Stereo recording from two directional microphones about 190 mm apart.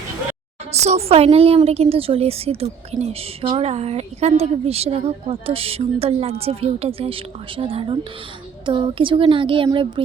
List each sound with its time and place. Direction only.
0.7 s a woman's voice: 35° right (ahead or behind)